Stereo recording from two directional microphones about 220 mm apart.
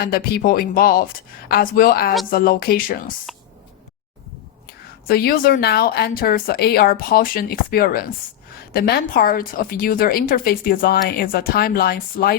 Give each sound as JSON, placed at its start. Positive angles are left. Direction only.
{"t": 0.0, "sound": "a woman's voice", "side_deg": 40}
{"t": 4.6, "sound": "a woman's voice", "side_deg": 45}